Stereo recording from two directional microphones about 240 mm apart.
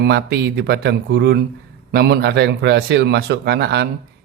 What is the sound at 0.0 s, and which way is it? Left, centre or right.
Speech, right.